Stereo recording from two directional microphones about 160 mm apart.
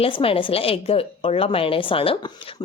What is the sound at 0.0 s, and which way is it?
Speech, 35° left (ahead or behind).